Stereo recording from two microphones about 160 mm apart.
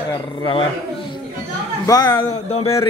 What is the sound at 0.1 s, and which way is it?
Speech, 30° left (ahead or behind).